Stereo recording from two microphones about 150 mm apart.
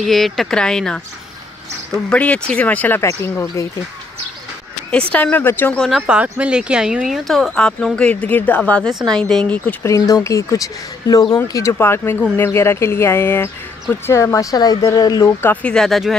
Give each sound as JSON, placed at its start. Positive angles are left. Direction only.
{"t": 0.0, "sound": "speech", "side_deg": 0}
{"t": 2.0, "sound": "speech", "side_deg": 10}
{"t": 5.1, "sound": "speech", "side_deg": 10}
{"t": 5.8, "sound": "speech", "side_deg": 0}
{"t": 9.8, "sound": "speech", "side_deg": 25}
{"t": 15.4, "sound": "speech", "side_deg": 10}